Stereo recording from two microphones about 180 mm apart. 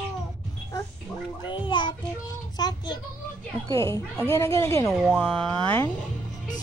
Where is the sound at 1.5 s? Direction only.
25° left (ahead or behind).